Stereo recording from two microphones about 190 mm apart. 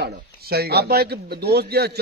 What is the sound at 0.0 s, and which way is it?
Speech, 55° right (ahead or behind).